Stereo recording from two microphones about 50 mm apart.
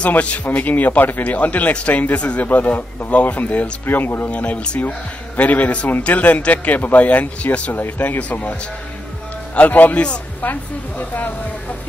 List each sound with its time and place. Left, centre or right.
0.0 s speech: left
3.8 s speech: left
4.3 s speech: left
9.6 s speech: left